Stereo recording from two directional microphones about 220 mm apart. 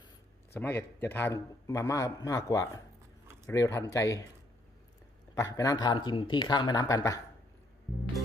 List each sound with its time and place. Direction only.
0.5 s a man's voice: 10° left (ahead or behind)
5.3 s speech: 15° left (ahead or behind)